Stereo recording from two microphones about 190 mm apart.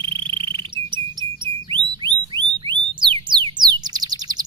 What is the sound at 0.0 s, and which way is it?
Bird, 25° right (ahead or behind).